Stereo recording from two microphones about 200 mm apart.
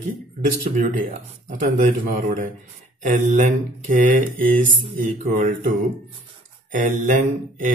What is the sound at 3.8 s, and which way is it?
Speech, 40° right (ahead or behind).